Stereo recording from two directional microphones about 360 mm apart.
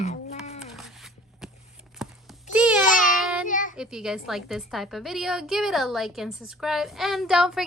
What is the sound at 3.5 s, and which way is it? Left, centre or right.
Child singing, left.